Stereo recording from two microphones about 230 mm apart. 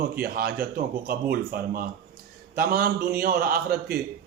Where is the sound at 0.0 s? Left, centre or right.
Right.